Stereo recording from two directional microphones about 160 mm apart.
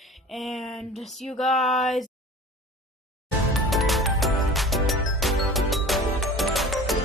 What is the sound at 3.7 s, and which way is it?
Music, centre (ahead or behind).